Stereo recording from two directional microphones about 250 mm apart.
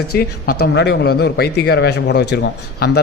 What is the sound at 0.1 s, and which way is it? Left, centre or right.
A man's voice, left.